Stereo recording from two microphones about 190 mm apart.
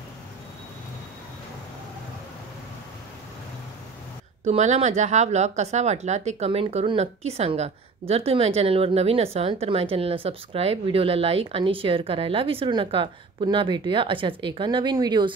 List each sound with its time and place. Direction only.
4.5 s speech: 35° right (ahead or behind)